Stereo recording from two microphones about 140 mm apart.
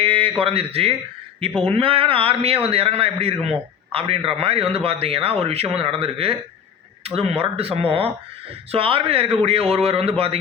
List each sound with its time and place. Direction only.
0.0 s a man's voice: 40° right (ahead or behind)